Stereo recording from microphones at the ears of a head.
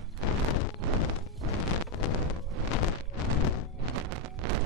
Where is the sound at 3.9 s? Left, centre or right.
Right.